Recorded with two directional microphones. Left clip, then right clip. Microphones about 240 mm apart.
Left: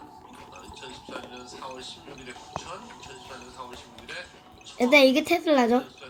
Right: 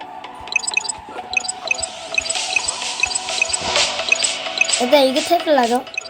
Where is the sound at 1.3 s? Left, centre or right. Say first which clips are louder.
Right 18 dB; right.